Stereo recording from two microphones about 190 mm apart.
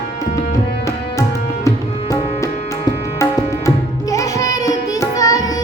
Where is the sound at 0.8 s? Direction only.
15° left (ahead or behind).